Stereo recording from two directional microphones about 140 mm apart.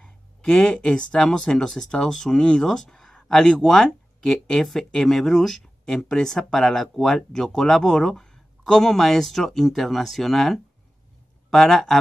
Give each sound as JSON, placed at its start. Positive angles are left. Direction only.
{"t": 0.0, "sound": "speech", "side_deg": 5}